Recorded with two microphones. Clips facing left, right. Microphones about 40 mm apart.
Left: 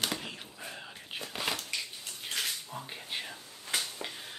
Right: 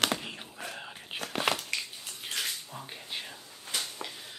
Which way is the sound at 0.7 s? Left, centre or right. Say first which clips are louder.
Right 2 dB; centre.